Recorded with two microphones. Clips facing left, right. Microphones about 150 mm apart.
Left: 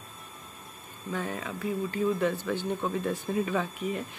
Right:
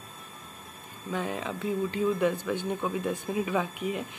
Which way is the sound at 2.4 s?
10° right (ahead or behind).